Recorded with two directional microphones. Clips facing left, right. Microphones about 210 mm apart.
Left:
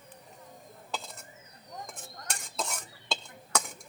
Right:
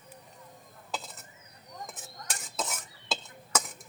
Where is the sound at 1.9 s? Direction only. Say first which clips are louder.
Left 1 dB; 5° right (ahead or behind).